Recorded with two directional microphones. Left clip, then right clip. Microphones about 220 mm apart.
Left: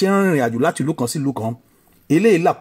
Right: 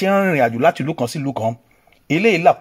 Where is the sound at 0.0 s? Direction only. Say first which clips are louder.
Right 2 dB; 20° right (ahead or behind).